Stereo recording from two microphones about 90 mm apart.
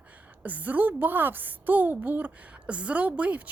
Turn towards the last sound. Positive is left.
turn(degrees=-15)  # may be behind; listen again after turning